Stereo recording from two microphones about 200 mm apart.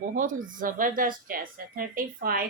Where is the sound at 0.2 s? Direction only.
40° right (ahead or behind).